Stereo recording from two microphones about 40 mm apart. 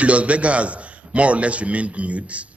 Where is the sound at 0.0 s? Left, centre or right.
Right.